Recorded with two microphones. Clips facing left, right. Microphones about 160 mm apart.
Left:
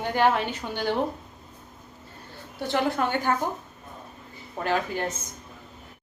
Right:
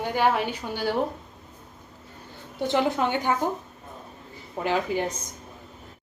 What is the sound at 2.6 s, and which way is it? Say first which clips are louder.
Speech: right 2 dB; 20° right (ahead or behind).